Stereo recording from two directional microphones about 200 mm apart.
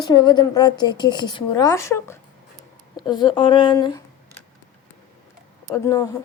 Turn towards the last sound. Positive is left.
turn(degrees=15)  # may be behind; listen again after turning